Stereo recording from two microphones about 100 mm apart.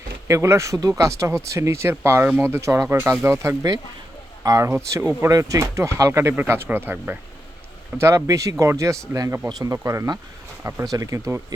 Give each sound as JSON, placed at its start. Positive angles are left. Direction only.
{"t": 0.3, "sound": "speech", "side_deg": -30}
{"t": 4.7, "sound": "speech", "side_deg": -25}
{"t": 10.8, "sound": "speech", "side_deg": -35}